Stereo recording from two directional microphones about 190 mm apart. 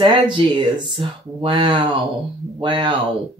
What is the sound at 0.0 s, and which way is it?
Speech, 25° right (ahead or behind).